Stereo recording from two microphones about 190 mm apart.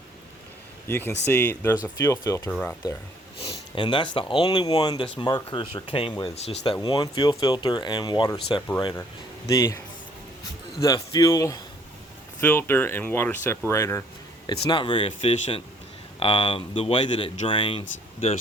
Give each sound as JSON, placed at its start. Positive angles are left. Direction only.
{"t": 0.9, "sound": "speech", "side_deg": 10}
{"t": 2.5, "sound": "speech", "side_deg": 5}
{"t": 3.4, "sound": "speech", "side_deg": 25}
{"t": 6.8, "sound": "speech", "side_deg": 20}